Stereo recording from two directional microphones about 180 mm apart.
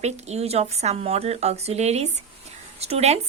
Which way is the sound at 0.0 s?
35° right (ahead or behind).